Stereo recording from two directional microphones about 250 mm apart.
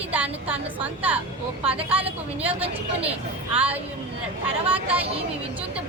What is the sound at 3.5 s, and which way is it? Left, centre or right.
Speech, centre.